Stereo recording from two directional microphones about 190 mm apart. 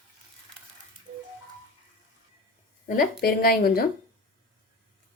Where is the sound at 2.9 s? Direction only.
50° left (ahead or behind).